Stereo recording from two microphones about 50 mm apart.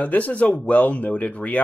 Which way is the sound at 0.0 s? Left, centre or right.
Left.